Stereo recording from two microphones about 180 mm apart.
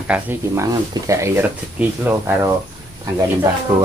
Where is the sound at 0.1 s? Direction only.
15° right (ahead or behind).